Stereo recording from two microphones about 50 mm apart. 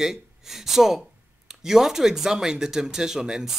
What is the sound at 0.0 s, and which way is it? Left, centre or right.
Speech, centre.